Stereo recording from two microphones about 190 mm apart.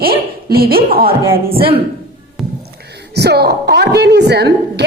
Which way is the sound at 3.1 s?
60° right (ahead or behind).